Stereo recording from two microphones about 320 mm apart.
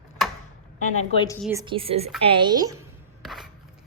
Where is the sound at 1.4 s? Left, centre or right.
Centre.